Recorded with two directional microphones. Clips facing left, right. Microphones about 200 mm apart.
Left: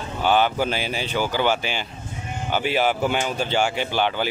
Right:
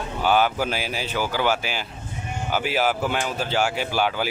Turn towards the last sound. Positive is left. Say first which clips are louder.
# left 1 dB
turn(degrees=-5)  # may be behind; listen again after turning